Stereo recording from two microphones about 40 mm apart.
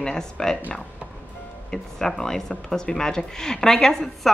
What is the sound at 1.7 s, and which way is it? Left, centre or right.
A woman's voice, centre.